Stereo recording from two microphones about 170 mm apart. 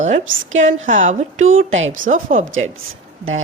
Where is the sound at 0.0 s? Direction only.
45° right (ahead or behind).